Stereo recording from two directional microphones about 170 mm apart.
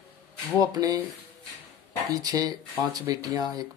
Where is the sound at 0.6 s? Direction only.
20° right (ahead or behind).